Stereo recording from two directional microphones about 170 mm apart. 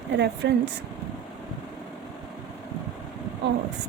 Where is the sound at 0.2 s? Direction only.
90° right.